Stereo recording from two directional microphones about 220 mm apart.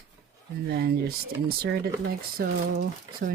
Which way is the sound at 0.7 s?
45° right (ahead or behind).